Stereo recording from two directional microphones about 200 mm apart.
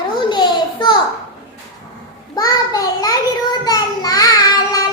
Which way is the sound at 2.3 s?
20° left (ahead or behind).